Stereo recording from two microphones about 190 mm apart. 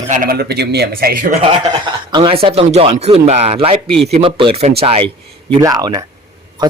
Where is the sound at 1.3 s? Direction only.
30° right (ahead or behind).